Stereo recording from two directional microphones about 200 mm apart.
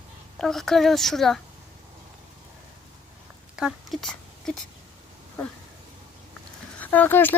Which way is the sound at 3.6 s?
Centre (ahead or behind).